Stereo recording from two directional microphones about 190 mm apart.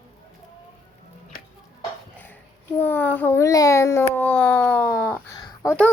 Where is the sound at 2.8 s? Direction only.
10° left (ahead or behind).